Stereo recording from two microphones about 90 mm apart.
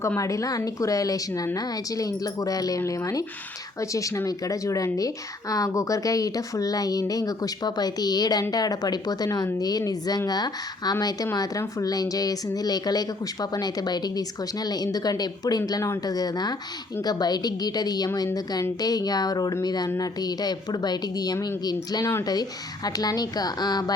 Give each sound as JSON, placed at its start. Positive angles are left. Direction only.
{"t": 0.2, "sound": "speech", "side_deg": 40}